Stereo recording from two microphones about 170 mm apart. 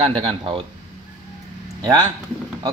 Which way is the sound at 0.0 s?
35° right (ahead or behind).